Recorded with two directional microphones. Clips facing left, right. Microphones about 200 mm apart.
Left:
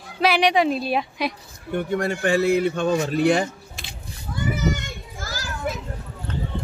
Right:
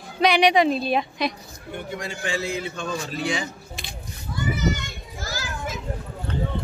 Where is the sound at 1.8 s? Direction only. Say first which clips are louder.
Left 9 dB; 60° left (ahead or behind).